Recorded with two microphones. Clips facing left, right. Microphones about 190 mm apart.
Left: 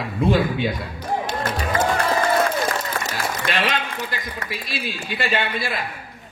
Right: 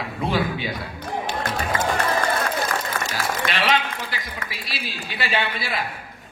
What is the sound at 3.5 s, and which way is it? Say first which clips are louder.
A man's voice: right 1 dB; 50° left (ahead or behind).